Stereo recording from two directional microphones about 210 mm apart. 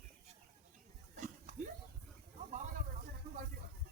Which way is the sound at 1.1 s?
35° right (ahead or behind).